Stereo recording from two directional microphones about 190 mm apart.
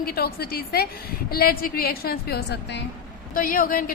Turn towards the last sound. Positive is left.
turn(degrees=50)  # may be behind; listen again after turning